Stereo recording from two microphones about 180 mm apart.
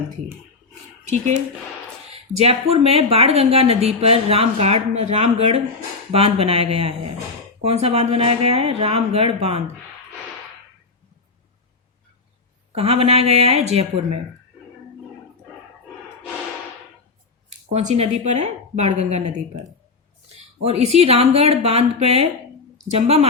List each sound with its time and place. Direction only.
2.1 s a woman's voice: 35° right (ahead or behind)
12.7 s a woman's voice: 35° right (ahead or behind)
17.7 s a woman's voice: 35° right (ahead or behind)
20.7 s a woman's voice: 35° right (ahead or behind)